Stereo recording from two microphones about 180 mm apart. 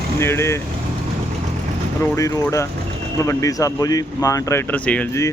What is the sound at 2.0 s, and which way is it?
Speech, 15° left (ahead or behind).